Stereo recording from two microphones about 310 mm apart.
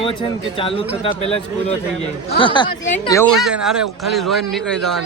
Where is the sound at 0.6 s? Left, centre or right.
Centre.